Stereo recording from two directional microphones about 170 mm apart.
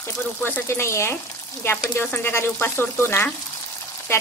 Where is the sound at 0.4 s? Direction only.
15° left (ahead or behind).